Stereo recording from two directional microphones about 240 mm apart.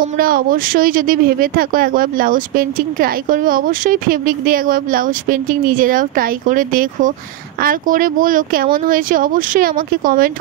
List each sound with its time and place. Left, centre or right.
0.0 s speech: right